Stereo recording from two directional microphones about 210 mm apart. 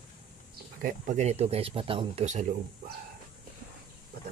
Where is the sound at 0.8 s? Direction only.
35° right (ahead or behind).